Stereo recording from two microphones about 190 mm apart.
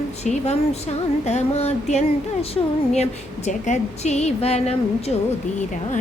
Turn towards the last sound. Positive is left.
turn(degrees=35)  # may be behind; listen again after turning